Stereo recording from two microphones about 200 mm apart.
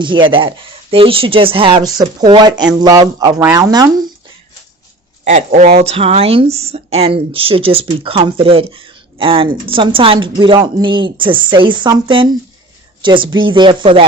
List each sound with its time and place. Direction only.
0.0 s speech: 25° right (ahead or behind)
5.2 s speech: 35° right (ahead or behind)